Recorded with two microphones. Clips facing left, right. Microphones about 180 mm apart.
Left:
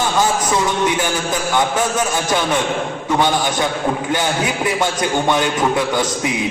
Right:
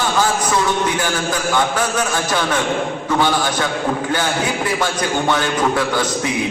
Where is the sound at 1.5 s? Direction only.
20° left (ahead or behind).